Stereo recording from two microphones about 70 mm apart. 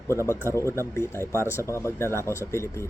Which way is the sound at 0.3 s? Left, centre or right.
Left.